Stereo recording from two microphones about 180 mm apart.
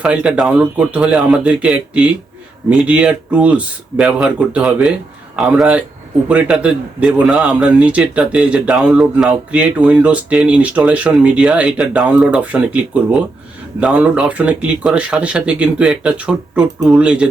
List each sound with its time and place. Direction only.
0.0 s a man's voice: 5° right (ahead or behind)